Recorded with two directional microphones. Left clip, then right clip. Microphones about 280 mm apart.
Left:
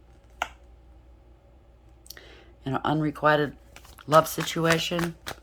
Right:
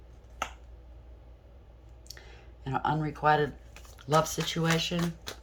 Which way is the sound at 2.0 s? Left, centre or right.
Left.